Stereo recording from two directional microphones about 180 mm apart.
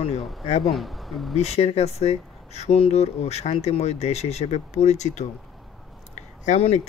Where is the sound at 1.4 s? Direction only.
35° left (ahead or behind).